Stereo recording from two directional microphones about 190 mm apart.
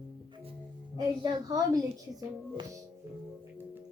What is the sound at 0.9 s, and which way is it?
Speech, 20° right (ahead or behind).